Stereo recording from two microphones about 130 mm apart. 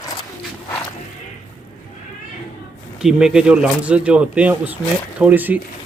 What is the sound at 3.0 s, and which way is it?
Speech, 5° right (ahead or behind).